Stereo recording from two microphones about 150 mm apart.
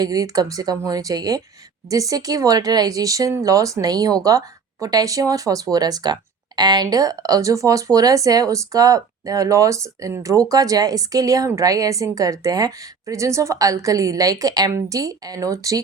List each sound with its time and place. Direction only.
0.0 s speech: 25° right (ahead or behind)